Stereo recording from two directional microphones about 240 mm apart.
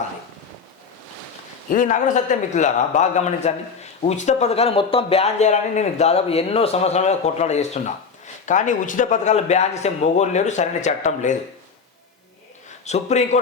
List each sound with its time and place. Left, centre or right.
1.7 s a man's voice: left
12.8 s a man's voice: left